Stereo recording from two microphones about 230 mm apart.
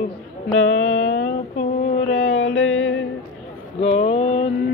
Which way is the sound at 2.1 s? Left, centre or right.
Left.